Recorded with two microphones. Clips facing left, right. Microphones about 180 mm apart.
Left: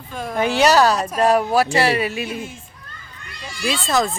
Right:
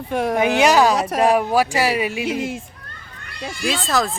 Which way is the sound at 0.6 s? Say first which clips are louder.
Left 1 dB; 15° right (ahead or behind).